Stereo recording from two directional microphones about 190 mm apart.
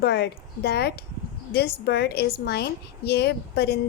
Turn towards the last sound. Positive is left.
turn(degrees=60)  # may be behind; listen again after turning